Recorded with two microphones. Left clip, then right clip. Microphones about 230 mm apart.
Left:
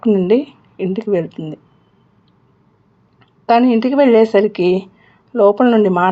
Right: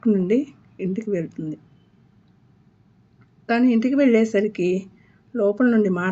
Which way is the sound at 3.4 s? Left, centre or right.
Centre.